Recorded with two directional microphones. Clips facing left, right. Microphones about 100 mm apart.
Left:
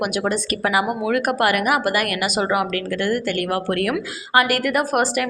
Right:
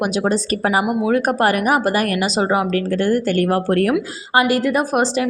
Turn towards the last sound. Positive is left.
turn(degrees=-20)  # may be behind; listen again after turning